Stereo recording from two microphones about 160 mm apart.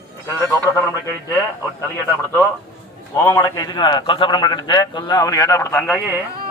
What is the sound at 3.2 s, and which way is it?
A man's voice, 20° left (ahead or behind).